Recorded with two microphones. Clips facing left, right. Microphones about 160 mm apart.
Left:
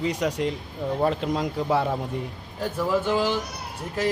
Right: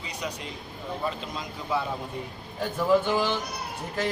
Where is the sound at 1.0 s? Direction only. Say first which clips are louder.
Left 9 dB; 70° left (ahead or behind).